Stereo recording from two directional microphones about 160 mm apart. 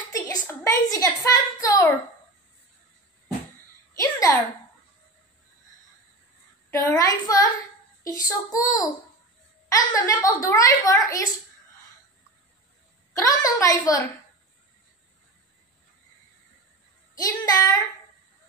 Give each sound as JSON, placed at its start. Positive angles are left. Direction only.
{"t": 0.1, "sound": "a woman's voice", "side_deg": 25}
{"t": 3.9, "sound": "a sound", "side_deg": 20}
{"t": 6.7, "sound": "a child's voice", "side_deg": 20}
{"t": 13.1, "sound": "a child's voice", "side_deg": 20}
{"t": 17.1, "sound": "a child's voice", "side_deg": 20}